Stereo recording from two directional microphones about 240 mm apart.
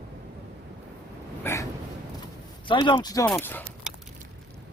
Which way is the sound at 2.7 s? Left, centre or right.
Centre.